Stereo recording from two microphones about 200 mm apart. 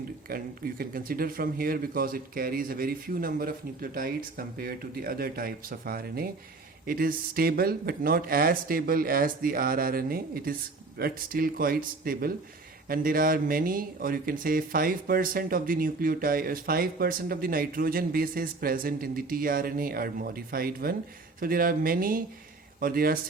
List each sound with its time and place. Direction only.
0.3 s speech: 50° right (ahead or behind)